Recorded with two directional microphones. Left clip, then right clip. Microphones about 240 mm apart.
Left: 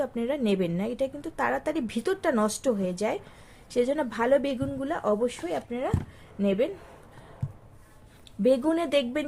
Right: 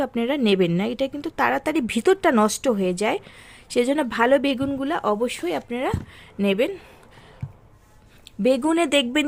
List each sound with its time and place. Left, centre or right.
0.0 s a woman's voice: right
8.4 s a woman's voice: right